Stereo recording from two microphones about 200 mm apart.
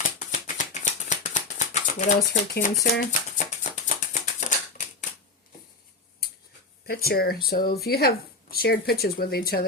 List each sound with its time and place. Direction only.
0.2 s a sound: 40° left (ahead or behind)
2.9 s music: 40° left (ahead or behind)
6.8 s speech: 50° left (ahead or behind)